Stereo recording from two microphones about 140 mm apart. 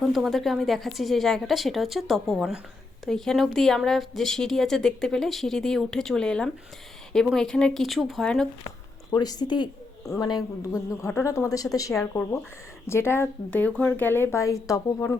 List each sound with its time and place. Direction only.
0.0 s a woman's voice: centre (ahead or behind)
9.1 s a woman's voice: 30° left (ahead or behind)